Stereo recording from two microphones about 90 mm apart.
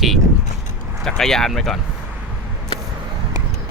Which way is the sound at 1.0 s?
5° left (ahead or behind).